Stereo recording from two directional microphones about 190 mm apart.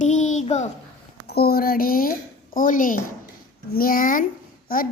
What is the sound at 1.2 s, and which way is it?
A woman's voice, 55° left (ahead or behind).